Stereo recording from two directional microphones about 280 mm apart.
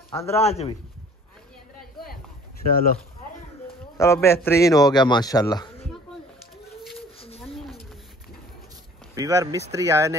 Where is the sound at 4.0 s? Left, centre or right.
Centre.